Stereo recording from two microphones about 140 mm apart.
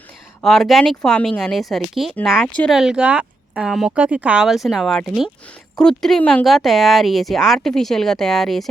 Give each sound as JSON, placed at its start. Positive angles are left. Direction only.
{"t": 0.4, "sound": "speech", "side_deg": 0}